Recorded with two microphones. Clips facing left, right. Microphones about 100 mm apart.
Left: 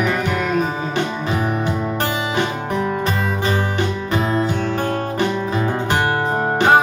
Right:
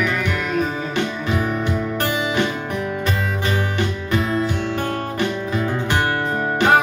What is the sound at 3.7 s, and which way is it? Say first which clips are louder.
Music: left 1 dB; 30° left (ahead or behind).